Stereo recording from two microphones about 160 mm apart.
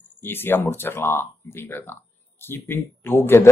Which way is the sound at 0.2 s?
15° left (ahead or behind).